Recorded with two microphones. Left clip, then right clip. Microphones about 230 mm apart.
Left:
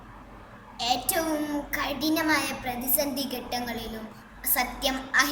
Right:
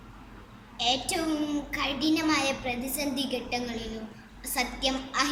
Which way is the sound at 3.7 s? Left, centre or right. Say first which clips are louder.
Left 2 dB; centre.